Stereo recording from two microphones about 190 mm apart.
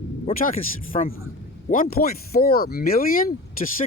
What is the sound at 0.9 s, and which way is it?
Speech, 30° left (ahead or behind).